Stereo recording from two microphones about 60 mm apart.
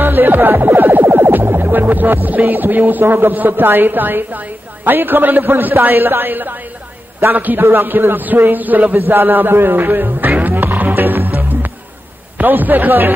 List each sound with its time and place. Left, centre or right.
0.0 s music: right